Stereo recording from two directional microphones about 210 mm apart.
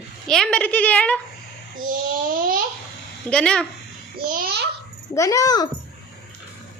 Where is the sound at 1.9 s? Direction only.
40° right (ahead or behind).